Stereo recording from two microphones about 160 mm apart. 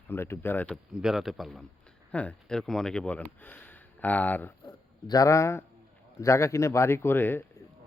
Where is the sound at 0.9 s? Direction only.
Centre (ahead or behind).